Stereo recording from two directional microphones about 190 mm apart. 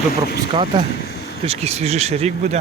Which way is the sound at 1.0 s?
60° left (ahead or behind).